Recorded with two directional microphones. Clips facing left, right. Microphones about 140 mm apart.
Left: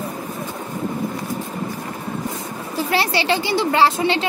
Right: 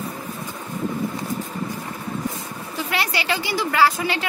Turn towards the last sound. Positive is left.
turn(degrees=25)  # may be behind; listen again after turning